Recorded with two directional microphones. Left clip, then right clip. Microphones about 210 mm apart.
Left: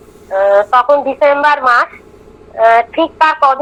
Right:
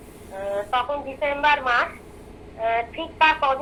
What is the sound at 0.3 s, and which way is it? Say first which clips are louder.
A woman's voice: left 16 dB; 50° left (ahead or behind).